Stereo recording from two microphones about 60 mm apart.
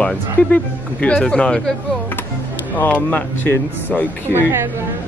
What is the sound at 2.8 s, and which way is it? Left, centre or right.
Speech, left.